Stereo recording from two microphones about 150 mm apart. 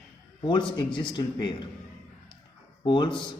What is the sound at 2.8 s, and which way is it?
Speech, 30° left (ahead or behind).